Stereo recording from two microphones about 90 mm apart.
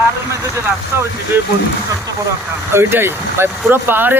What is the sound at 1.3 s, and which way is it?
Speech, 25° right (ahead or behind).